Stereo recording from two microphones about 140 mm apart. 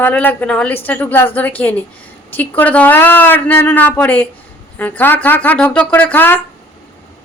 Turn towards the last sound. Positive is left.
turn(degrees=15)  # may be behind; listen again after turning